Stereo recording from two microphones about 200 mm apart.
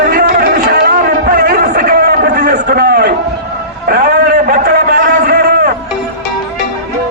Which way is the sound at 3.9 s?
50° right (ahead or behind).